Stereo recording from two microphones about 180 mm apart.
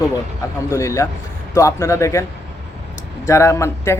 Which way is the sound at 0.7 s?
15° left (ahead or behind).